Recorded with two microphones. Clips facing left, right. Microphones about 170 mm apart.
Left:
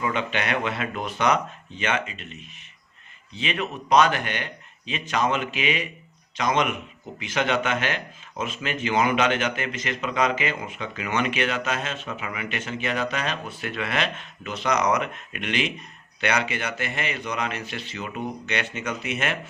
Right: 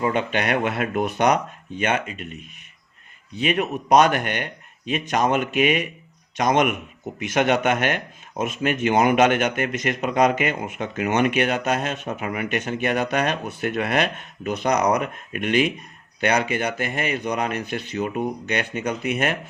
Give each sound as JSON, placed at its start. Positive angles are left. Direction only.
{"t": 0.0, "sound": "speech", "side_deg": -45}